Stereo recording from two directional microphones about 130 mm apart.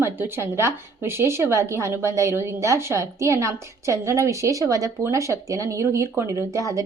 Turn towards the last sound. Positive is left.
turn(degrees=-25)  # may be behind; listen again after turning